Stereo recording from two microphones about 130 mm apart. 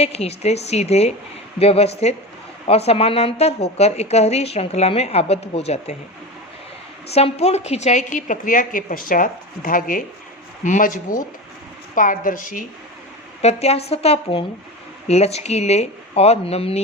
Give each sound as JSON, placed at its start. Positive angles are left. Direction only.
{"t": 0.0, "sound": "a woman's voice", "side_deg": 50}
{"t": 7.1, "sound": "a woman's voice", "side_deg": 50}
{"t": 10.6, "sound": "a woman's voice", "side_deg": 75}
{"t": 13.4, "sound": "a woman's voice", "side_deg": 55}